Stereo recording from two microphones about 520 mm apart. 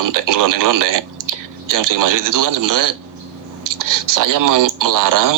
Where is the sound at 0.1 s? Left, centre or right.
Right.